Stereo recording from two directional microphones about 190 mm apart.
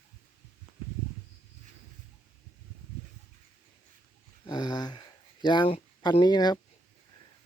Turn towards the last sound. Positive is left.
turn(degrees=20)  # may be behind; listen again after turning